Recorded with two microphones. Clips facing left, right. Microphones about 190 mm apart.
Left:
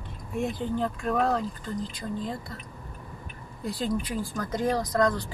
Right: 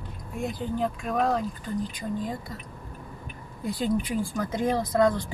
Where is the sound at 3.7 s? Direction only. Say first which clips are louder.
Right 3 dB; 15° right (ahead or behind).